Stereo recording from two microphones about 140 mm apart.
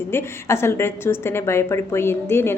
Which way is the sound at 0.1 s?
20° left (ahead or behind).